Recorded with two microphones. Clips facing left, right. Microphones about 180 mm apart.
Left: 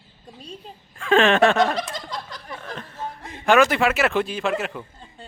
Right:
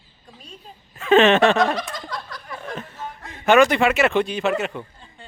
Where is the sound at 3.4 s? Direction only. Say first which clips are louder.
Right 2 dB; centre (ahead or behind).